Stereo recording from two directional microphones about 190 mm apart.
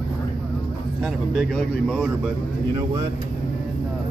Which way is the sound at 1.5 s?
Centre (ahead or behind).